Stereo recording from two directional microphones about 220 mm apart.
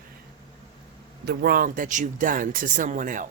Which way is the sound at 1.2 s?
45° right (ahead or behind).